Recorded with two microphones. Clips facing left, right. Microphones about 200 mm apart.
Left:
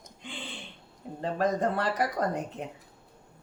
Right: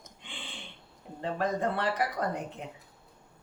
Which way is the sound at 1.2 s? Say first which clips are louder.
Left 3 dB; 45° left (ahead or behind).